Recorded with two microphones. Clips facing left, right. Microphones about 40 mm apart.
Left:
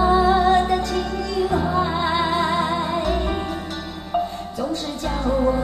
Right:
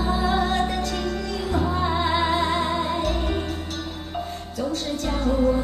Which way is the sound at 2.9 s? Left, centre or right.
Left.